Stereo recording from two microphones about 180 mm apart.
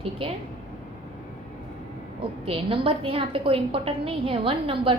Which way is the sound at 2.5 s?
30° right (ahead or behind).